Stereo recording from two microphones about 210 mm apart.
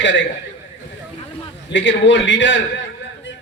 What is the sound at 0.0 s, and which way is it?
Speech, 60° left (ahead or behind).